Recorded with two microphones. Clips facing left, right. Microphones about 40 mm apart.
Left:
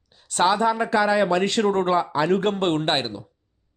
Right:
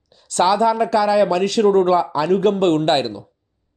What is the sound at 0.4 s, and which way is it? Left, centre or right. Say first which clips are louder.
Speech: right 4 dB; left.